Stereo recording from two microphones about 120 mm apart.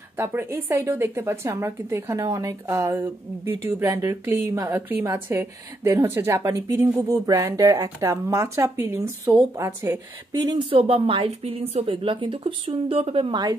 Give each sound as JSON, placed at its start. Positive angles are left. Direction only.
{"t": 0.2, "sound": "a woman's voice", "side_deg": -20}